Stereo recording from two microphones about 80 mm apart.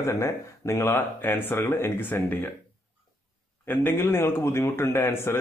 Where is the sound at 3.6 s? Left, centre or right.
Left.